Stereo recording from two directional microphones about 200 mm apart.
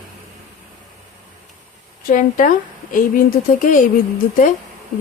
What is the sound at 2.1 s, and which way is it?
Speech, 40° left (ahead or behind).